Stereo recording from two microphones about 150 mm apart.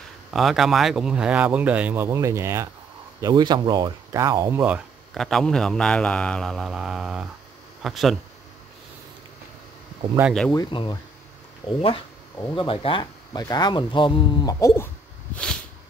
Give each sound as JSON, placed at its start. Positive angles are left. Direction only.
{"t": 0.3, "sound": "speech", "side_deg": 0}
{"t": 5.1, "sound": "speech", "side_deg": 0}
{"t": 10.5, "sound": "speech", "side_deg": 30}